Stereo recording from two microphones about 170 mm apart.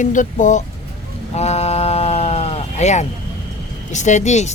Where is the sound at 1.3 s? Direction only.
40° left (ahead or behind).